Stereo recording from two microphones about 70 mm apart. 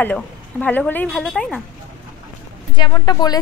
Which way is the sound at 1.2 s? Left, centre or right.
Centre.